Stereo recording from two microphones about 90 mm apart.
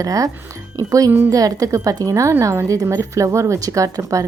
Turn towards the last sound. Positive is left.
turn(degrees=-40)  # may be behind; listen again after turning